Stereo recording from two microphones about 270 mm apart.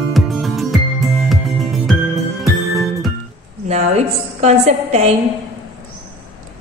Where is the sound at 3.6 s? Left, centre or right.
Right.